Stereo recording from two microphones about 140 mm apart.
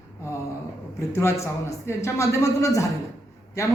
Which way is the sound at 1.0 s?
20° left (ahead or behind).